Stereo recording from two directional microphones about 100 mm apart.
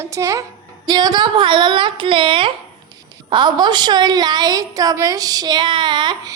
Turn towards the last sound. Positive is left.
turn(degrees=-50)  # may be behind; listen again after turning